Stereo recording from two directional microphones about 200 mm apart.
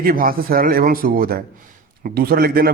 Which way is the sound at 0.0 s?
45° right (ahead or behind).